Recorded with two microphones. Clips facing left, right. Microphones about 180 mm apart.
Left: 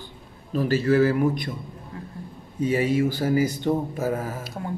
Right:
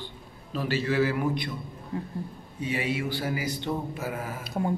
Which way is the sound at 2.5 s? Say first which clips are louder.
Left 8 dB; 45° left (ahead or behind).